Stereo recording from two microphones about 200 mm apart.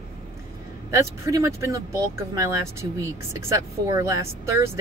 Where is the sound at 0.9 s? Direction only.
15° right (ahead or behind).